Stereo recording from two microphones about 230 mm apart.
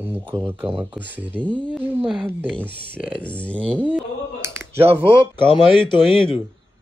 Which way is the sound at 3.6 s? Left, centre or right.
Centre.